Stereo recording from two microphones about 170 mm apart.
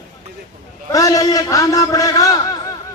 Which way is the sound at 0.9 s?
20° left (ahead or behind).